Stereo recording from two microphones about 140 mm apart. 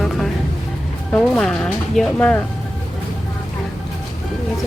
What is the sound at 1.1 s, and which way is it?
Speech, 5° left (ahead or behind).